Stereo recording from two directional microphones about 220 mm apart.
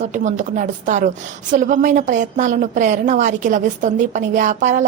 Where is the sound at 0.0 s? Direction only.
35° right (ahead or behind).